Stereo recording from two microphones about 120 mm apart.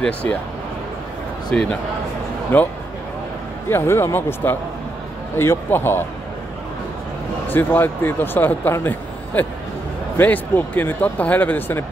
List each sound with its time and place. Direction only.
0.0 s speech: 10° left (ahead or behind)
1.5 s speech: 5° left (ahead or behind)
7.4 s speech: 15° left (ahead or behind)